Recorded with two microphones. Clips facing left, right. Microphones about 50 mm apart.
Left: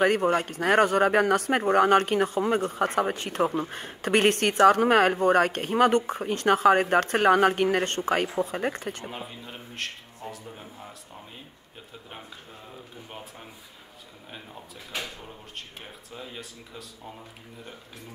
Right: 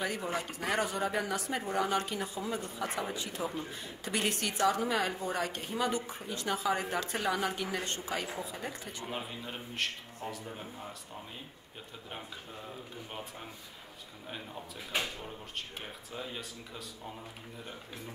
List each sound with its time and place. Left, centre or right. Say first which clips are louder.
0.0 s speech: left 12 dB; left
9.1 s a man's voice: left 1 dB; centre
13.1 s a man's voice: left 1 dB; centre
15.8 s a man's voice: even; centre